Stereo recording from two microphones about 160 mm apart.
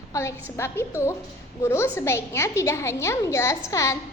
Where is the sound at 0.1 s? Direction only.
20° left (ahead or behind).